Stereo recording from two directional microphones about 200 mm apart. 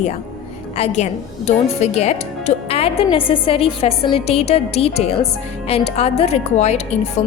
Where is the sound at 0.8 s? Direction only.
30° left (ahead or behind).